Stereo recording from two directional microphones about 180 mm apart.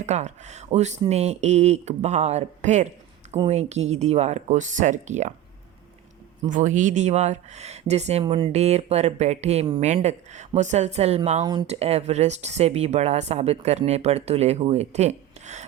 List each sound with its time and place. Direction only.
0.0 s speech: 40° right (ahead or behind)
6.5 s speech: 45° right (ahead or behind)